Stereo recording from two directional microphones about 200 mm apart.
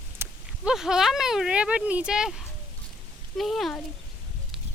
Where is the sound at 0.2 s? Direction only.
5° right (ahead or behind).